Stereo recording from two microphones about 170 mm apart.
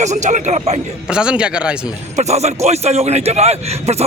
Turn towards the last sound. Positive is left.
turn(degrees=-40)  # may be behind; listen again after turning